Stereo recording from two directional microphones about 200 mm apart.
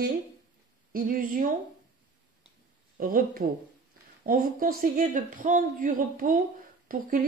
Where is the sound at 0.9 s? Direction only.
45° right (ahead or behind).